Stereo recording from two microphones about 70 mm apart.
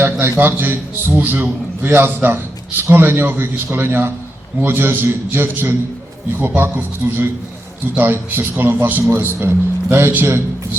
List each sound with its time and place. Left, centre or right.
0.0 s a man's voice: right